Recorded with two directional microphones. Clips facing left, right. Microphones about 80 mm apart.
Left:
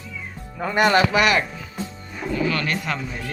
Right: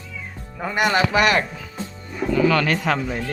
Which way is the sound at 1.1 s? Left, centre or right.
Right.